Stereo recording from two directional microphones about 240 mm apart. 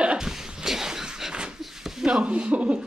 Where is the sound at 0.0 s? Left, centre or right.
Centre.